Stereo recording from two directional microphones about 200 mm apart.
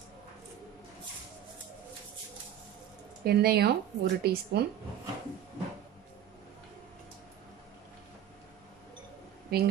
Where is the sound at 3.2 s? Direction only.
50° right (ahead or behind).